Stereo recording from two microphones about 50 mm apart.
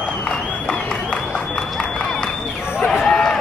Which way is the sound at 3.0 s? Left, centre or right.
Centre.